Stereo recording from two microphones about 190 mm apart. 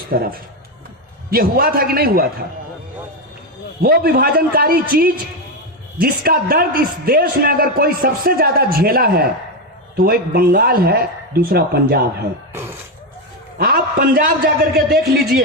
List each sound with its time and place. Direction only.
0.1 s a man's voice: 50° right (ahead or behind)
3.8 s a man's voice: 50° right (ahead or behind)
13.6 s a man's voice: 55° right (ahead or behind)